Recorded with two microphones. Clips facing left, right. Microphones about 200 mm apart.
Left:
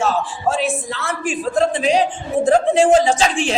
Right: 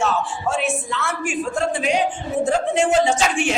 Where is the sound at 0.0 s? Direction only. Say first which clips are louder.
Left 3 dB; 35° left (ahead or behind).